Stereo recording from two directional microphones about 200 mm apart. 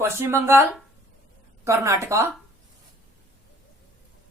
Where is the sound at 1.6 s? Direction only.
15° right (ahead or behind).